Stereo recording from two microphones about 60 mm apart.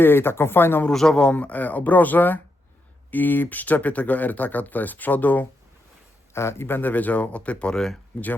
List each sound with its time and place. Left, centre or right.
0.0 s speech: left
0.9 s a man's voice: centre
1.3 s speech: left
6.3 s speech: left; by 7.8 s centre